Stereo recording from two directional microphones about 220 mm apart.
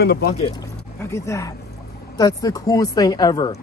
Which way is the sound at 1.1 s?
15° left (ahead or behind).